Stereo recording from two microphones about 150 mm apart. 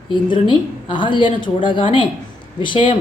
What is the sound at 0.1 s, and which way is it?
A woman's voice, 30° left (ahead or behind).